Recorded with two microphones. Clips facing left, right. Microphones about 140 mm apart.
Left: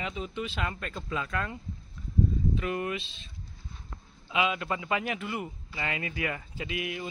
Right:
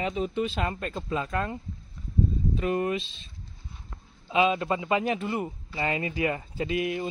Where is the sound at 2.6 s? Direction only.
35° right (ahead or behind).